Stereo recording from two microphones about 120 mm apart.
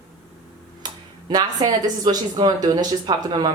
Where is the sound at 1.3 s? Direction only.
35° right (ahead or behind).